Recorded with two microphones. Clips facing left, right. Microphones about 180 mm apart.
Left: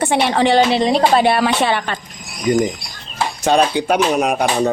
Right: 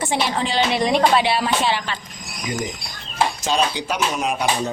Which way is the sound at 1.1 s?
50° left (ahead or behind).